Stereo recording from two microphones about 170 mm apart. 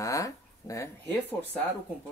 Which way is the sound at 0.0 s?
20° left (ahead or behind).